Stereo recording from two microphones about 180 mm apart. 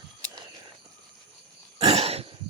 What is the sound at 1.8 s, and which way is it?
Throat clearing, 35° right (ahead or behind).